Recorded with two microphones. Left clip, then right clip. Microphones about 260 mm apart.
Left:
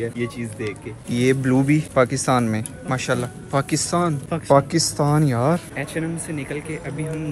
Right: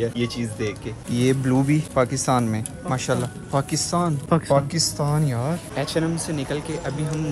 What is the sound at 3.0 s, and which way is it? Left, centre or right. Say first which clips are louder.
A man's voice: left 1 dB; centre.